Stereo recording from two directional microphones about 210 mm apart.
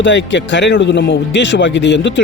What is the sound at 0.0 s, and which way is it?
Speech, 60° left (ahead or behind).